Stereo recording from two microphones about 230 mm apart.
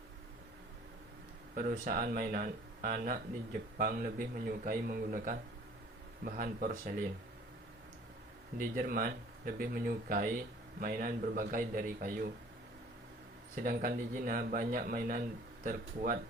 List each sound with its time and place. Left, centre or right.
1.5 s speech: right
8.5 s speech: right
13.7 s speech: right